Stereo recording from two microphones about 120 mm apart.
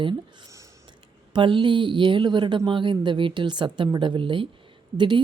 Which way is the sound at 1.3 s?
45° right (ahead or behind).